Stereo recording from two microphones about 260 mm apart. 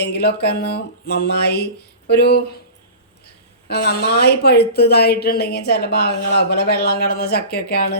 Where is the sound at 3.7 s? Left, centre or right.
Left.